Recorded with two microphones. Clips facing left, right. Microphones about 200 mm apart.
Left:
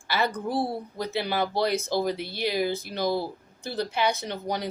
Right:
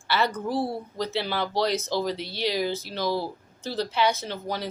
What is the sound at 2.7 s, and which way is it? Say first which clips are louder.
Speech: left 1 dB; 15° left (ahead or behind).